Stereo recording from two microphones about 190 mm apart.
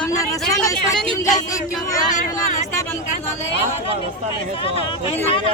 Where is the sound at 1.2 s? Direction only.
15° left (ahead or behind).